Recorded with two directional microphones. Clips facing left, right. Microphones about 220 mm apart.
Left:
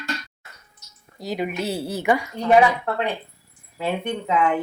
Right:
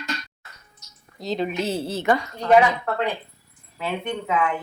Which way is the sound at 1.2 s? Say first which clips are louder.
Right 1 dB; 10° left (ahead or behind).